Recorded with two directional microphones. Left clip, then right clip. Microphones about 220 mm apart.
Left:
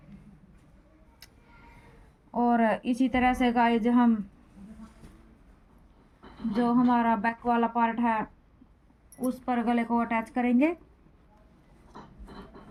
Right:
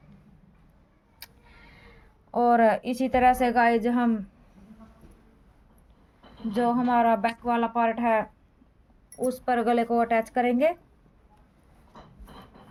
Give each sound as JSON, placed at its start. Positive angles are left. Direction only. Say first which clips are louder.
{"t": 1.2, "sound": "music", "louder": "right 5 dB", "side_deg": -45}
{"t": 2.3, "sound": "speech", "louder": "right 5 dB", "side_deg": -45}
{"t": 6.6, "sound": "speech", "louder": "right 3 dB", "side_deg": -50}
{"t": 9.2, "sound": "speech", "louder": "right 5 dB", "side_deg": -45}